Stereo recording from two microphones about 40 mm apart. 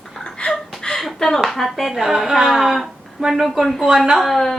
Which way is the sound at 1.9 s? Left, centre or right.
Centre.